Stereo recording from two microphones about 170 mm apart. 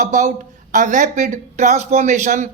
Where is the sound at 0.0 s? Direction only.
45° right (ahead or behind).